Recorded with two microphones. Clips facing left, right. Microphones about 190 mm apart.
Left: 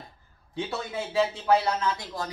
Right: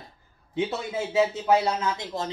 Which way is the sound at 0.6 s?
20° right (ahead or behind).